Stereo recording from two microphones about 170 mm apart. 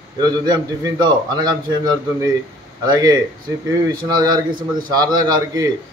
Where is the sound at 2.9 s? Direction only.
20° right (ahead or behind).